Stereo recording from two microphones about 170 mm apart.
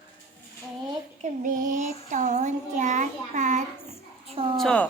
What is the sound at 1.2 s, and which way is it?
A child's voice, 50° right (ahead or behind).